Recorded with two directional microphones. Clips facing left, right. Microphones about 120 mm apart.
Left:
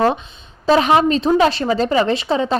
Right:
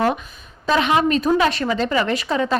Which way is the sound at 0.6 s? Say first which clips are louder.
Left 4 dB; 35° left (ahead or behind).